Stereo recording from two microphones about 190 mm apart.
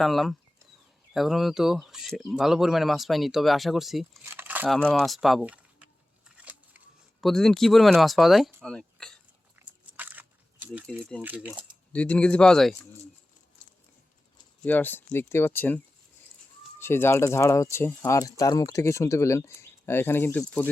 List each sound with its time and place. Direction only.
0.0 s speech: centre (ahead or behind)
4.3 s crumpling: 10° right (ahead or behind)
4.8 s a sound: 5° left (ahead or behind)
10.0 s a sound: 10° right (ahead or behind)
11.2 s speech: 10° right (ahead or behind)
11.9 s speech: 5° left (ahead or behind)
14.6 s speech: 10° left (ahead or behind)
16.8 s speech: 10° left (ahead or behind)